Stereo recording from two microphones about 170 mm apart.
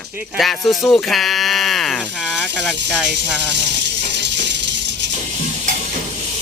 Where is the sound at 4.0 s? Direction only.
90° right.